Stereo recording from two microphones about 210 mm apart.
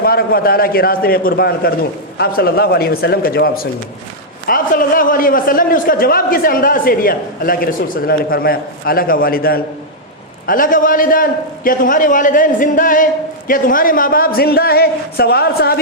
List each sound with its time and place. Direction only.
0.0 s a man's voice: 45° left (ahead or behind)